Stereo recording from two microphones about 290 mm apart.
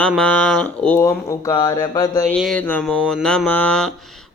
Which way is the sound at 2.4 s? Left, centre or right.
Centre.